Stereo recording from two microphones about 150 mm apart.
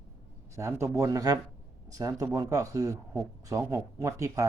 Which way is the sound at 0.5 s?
20° right (ahead or behind).